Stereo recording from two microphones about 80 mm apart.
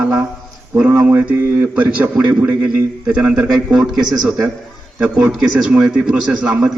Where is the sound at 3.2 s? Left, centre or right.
Centre.